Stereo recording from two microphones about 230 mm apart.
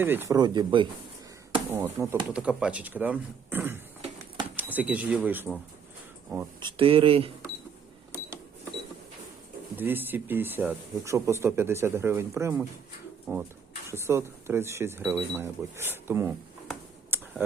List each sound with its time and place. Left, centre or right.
0.0 s speech: centre
6.6 s speech: right
9.7 s speech: centre
16.6 s a sound: centre